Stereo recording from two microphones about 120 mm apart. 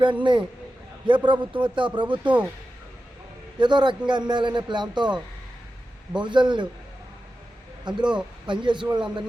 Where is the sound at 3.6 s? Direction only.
40° right (ahead or behind).